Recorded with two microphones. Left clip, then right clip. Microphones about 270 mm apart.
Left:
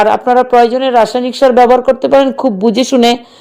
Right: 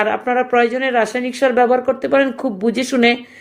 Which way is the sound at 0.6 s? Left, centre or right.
Centre.